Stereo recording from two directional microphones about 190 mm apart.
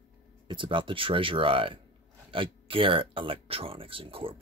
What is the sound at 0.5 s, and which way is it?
Speech, 25° right (ahead or behind).